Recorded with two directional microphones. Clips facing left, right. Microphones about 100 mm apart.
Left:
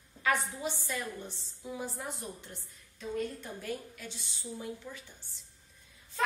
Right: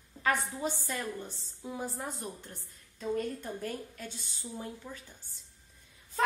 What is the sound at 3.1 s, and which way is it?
A woman's voice, 40° right (ahead or behind).